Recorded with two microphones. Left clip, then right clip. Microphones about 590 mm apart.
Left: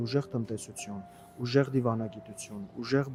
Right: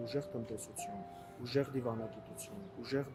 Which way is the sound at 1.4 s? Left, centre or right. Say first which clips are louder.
Left 8 dB; left.